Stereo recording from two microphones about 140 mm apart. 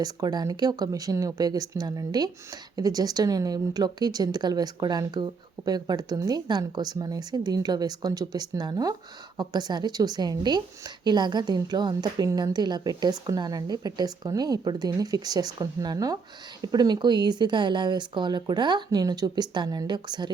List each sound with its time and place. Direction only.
0.0 s a woman's voice: 30° right (ahead or behind)